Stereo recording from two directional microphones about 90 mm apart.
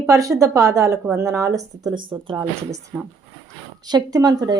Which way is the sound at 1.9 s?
65° right (ahead or behind).